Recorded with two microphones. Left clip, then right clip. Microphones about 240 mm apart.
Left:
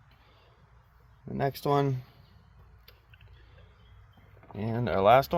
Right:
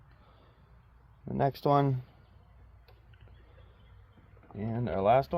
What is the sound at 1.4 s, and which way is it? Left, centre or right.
Speech, centre.